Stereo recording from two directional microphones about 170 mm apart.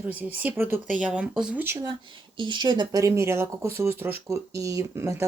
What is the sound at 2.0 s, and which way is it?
Speech, 30° right (ahead or behind).